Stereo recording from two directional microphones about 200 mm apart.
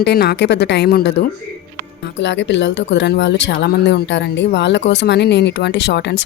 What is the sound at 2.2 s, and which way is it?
Speech, 65° left (ahead or behind).